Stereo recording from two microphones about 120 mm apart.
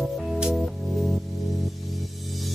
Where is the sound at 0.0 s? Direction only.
5° right (ahead or behind).